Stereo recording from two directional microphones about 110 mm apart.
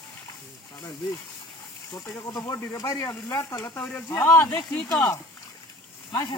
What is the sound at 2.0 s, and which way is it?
Speech, 30° left (ahead or behind).